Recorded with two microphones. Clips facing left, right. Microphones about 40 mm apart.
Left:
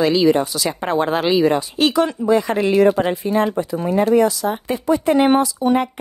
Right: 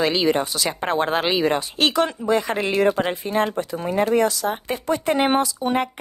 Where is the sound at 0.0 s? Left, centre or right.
Right.